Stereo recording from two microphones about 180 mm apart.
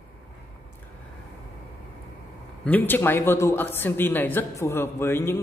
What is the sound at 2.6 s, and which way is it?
A man's voice, 10° left (ahead or behind).